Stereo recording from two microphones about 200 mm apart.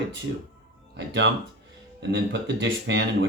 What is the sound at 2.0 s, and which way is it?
Speech, 65° right (ahead or behind).